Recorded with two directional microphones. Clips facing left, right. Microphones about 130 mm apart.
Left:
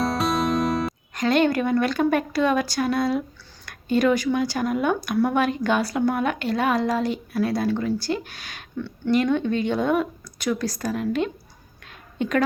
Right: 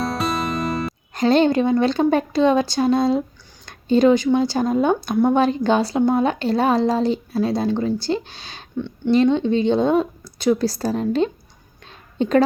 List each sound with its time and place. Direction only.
0.0 s music: centre (ahead or behind)
1.1 s speech: 30° right (ahead or behind)
11.9 s a sound: 30° right (ahead or behind)